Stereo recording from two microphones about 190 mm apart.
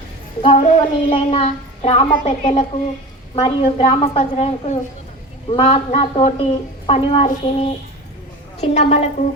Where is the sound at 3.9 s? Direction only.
30° left (ahead or behind).